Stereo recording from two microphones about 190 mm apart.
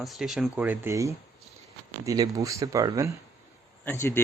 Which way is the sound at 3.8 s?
10° left (ahead or behind).